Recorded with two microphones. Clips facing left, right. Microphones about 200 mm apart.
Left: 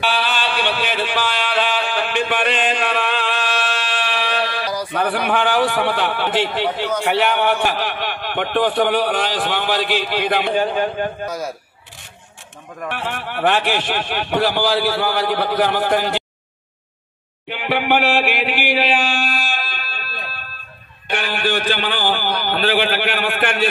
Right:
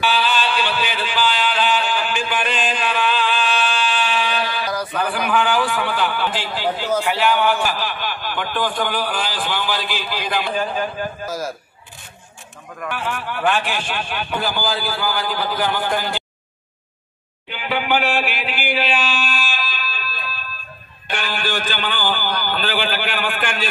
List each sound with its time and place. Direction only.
0.0 s a sound: 60° left (ahead or behind)
4.9 s a man's voice: 60° left (ahead or behind)
11.2 s a man's voice: centre (ahead or behind)
13.2 s a man's voice: 70° left (ahead or behind)
17.5 s chant: 60° left (ahead or behind)
21.1 s a man's voice: 60° left (ahead or behind)